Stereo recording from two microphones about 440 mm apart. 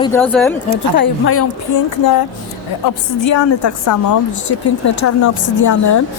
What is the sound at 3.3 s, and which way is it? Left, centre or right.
A woman's voice, left.